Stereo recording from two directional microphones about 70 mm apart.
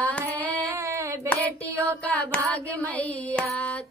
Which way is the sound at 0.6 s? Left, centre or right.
Right.